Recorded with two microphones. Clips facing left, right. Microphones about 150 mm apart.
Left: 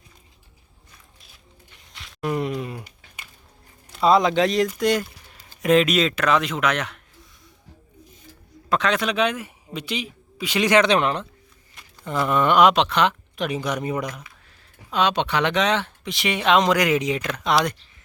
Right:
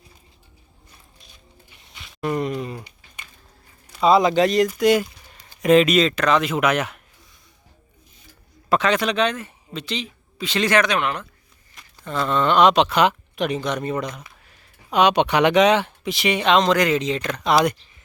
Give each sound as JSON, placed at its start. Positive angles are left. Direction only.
{"t": 1.9, "sound": "a sound", "side_deg": 0}
{"t": 3.9, "sound": "speech", "side_deg": 0}
{"t": 8.7, "sound": "speech", "side_deg": 0}
{"t": 10.9, "sound": "speech", "side_deg": 30}
{"t": 12.0, "sound": "speech", "side_deg": 15}
{"t": 13.4, "sound": "speech", "side_deg": 5}
{"t": 14.8, "sound": "speech", "side_deg": -15}
{"t": 17.3, "sound": "speech", "side_deg": 0}